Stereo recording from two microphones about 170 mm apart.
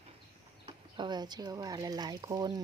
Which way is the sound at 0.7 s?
25° right (ahead or behind).